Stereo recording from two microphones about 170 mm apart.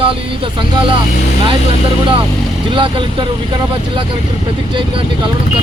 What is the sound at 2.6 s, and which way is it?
Speech, 30° right (ahead or behind).